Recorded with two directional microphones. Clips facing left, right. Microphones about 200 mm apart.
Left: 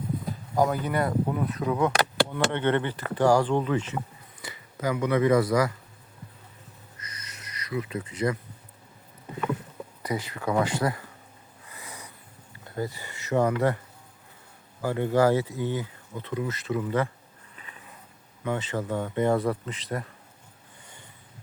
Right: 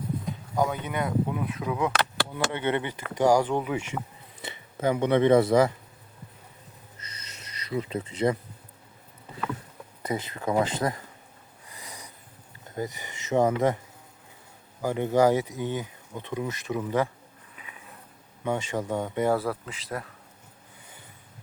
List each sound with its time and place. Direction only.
0.3 s speech: centre (ahead or behind)
4.4 s speech: 25° right (ahead or behind)
7.0 s a sound: 30° right (ahead or behind)
10.0 s speech: 25° right (ahead or behind)
11.7 s a sound: 15° right (ahead or behind)
12.6 s speech: 20° right (ahead or behind)
14.8 s speech: 15° right (ahead or behind)
18.4 s speech: 15° right (ahead or behind); by 20.1 s centre (ahead or behind)